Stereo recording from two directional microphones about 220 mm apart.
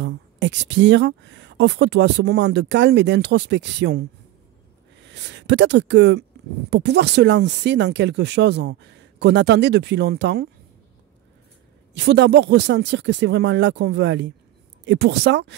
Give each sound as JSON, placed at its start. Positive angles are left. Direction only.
{"t": 0.0, "sound": "speech", "side_deg": -55}
{"t": 11.9, "sound": "speech", "side_deg": -50}